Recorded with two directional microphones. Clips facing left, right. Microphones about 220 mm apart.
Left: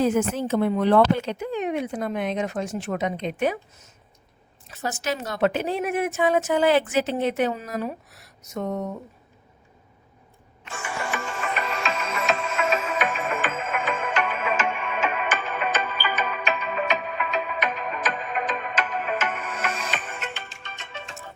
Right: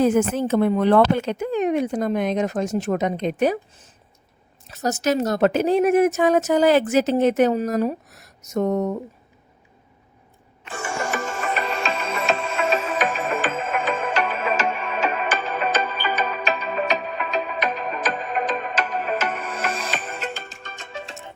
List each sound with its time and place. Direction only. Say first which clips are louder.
0.0 s a woman's voice: right 4 dB; 50° right (ahead or behind)
10.7 s music: right 4 dB; 40° right (ahead or behind)